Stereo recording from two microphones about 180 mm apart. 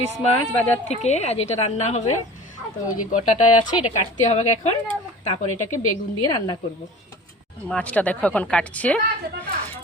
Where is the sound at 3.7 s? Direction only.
30° left (ahead or behind).